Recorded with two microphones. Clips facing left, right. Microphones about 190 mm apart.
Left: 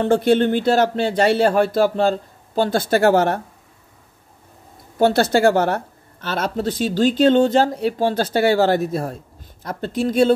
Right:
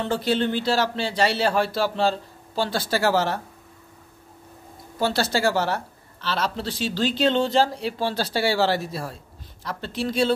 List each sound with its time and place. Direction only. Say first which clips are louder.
0.0 s speech: left 7 dB; 50° left (ahead or behind)
4.9 s speech: left 8 dB; 55° left (ahead or behind)